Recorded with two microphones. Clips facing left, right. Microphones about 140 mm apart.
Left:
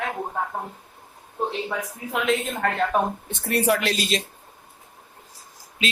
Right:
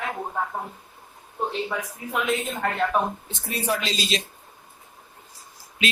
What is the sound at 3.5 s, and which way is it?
Speech, 70° left (ahead or behind).